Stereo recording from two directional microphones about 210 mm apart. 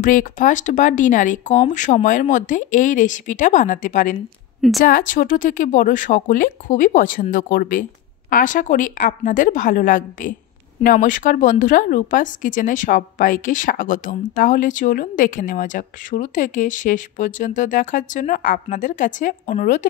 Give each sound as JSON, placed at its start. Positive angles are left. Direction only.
{"t": 0.0, "sound": "speech", "side_deg": 40}
{"t": 4.6, "sound": "speech", "side_deg": 0}
{"t": 4.8, "sound": "speech", "side_deg": 40}